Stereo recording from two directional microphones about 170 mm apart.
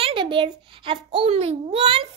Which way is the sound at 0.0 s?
30° right (ahead or behind).